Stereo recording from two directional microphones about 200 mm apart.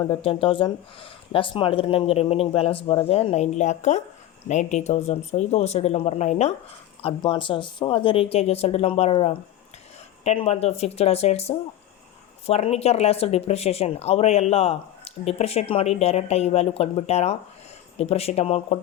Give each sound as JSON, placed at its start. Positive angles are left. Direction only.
{"t": 0.0, "sound": "speech", "side_deg": 25}